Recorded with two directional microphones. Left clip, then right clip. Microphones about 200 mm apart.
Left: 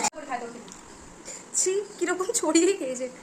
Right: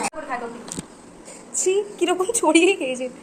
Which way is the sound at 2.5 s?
35° left (ahead or behind).